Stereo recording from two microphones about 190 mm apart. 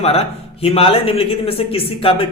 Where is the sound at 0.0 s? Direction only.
30° left (ahead or behind).